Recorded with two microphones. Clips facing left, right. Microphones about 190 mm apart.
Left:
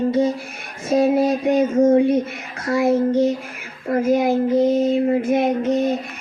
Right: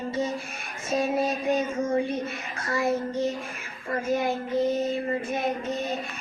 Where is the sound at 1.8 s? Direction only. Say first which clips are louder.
Left 11 dB; 90° left.